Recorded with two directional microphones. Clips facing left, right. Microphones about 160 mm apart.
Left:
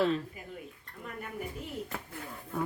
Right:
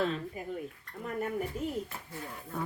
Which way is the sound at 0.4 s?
40° right (ahead or behind).